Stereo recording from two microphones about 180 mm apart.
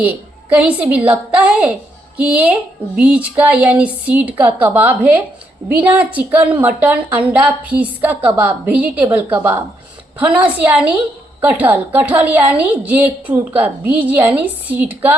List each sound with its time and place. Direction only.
0.0 s a woman's voice: 10° right (ahead or behind)